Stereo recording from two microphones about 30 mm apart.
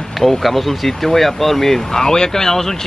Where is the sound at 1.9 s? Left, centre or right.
Left.